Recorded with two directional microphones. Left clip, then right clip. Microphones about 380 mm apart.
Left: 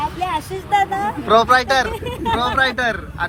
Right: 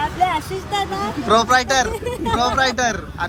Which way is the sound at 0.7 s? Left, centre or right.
Left.